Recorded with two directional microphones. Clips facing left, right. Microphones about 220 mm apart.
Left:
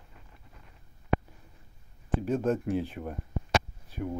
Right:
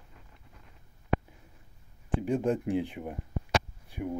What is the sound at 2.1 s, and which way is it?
Speech, 15° right (ahead or behind).